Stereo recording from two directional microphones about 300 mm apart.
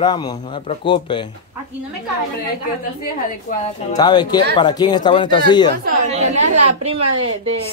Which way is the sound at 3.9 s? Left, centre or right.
Centre.